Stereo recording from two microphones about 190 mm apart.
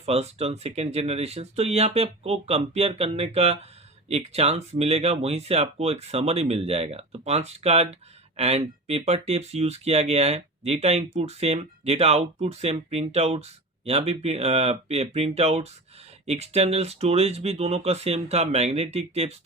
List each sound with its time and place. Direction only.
0.0 s speech: 35° right (ahead or behind)